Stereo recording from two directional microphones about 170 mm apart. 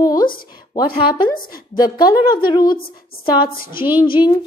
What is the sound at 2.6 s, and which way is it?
Speech, 60° left (ahead or behind).